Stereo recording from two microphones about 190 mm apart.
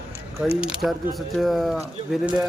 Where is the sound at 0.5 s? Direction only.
5° right (ahead or behind).